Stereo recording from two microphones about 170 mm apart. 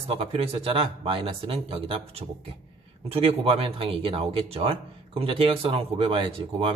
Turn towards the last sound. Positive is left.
turn(degrees=-30)  # may be behind; listen again after turning